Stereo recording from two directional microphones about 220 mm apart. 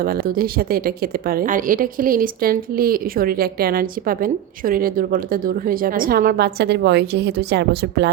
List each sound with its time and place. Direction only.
0.0 s a woman's voice: 40° right (ahead or behind)